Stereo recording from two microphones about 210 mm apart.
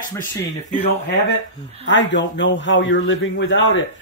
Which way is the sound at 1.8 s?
60° left (ahead or behind).